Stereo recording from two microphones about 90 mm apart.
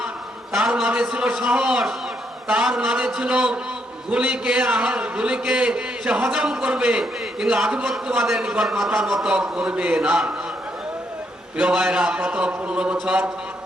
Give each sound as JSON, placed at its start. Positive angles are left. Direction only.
{"t": 0.5, "sound": "a man's voice", "side_deg": -5}
{"t": 11.5, "sound": "a man's voice", "side_deg": -10}